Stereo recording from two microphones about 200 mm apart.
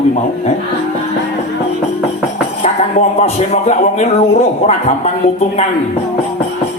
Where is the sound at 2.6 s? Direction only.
30° left (ahead or behind).